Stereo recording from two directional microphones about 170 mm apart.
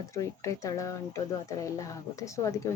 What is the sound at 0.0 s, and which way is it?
Speech, 20° left (ahead or behind).